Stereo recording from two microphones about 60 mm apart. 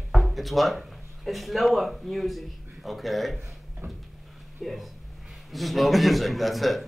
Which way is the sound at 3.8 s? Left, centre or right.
Right.